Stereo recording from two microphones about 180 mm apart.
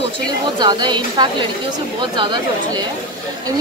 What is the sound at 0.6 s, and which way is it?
A woman's voice, 25° right (ahead or behind).